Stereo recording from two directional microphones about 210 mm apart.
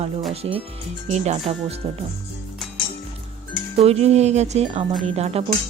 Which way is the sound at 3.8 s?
30° right (ahead or behind).